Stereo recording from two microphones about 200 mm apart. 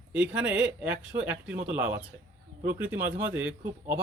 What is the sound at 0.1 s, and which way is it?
Speech, 5° right (ahead or behind).